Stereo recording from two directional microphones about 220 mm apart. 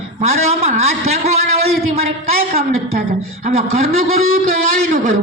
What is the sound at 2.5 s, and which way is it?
Speech, 25° right (ahead or behind).